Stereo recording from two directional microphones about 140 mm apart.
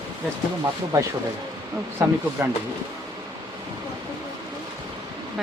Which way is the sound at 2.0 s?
20° right (ahead or behind).